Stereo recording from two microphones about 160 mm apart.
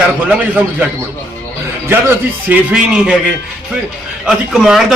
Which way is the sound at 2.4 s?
5° right (ahead or behind).